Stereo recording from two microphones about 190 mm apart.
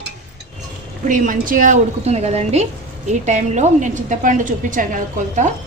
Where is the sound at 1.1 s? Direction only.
45° right (ahead or behind).